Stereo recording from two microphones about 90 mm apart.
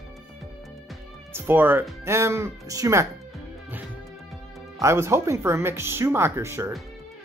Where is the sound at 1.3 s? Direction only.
25° right (ahead or behind).